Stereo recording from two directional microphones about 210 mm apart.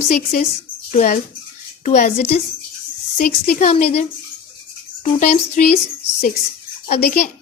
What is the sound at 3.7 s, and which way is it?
A woman's voice, 30° left (ahead or behind).